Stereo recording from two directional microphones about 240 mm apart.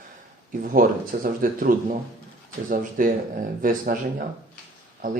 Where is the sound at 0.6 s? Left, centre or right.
Right.